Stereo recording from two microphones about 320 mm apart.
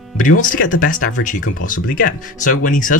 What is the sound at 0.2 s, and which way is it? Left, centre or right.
Speech, left.